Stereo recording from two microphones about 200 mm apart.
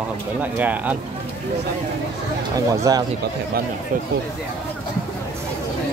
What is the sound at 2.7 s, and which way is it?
Speech, 15° right (ahead or behind).